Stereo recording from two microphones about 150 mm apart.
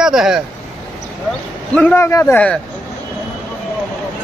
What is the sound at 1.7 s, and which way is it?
Speech, 15° left (ahead or behind).